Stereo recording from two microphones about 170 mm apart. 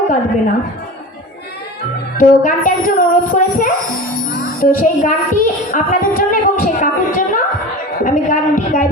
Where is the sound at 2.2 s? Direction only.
50° left (ahead or behind).